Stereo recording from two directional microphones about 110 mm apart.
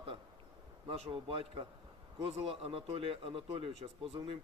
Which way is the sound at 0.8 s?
70° right (ahead or behind).